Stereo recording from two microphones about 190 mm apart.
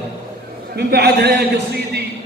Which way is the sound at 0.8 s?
60° right (ahead or behind).